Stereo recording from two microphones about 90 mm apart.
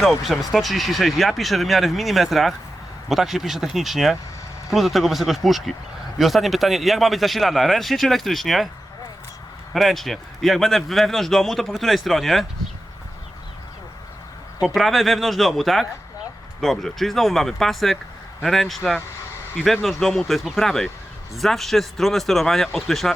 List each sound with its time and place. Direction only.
0.0 s a man's voice: centre (ahead or behind)
9.7 s a man's voice: centre (ahead or behind)
14.6 s a man's voice: centre (ahead or behind)